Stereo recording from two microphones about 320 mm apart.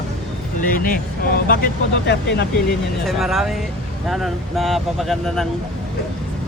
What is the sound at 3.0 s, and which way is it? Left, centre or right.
Speech, centre.